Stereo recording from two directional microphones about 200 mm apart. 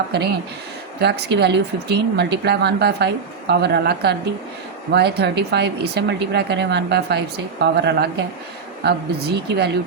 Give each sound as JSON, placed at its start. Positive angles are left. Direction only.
{"t": 0.1, "sound": "speech", "side_deg": -55}